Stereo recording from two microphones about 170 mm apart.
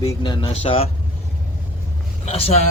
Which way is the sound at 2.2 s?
40° left (ahead or behind).